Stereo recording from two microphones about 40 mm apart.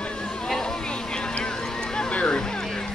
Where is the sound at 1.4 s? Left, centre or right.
Centre.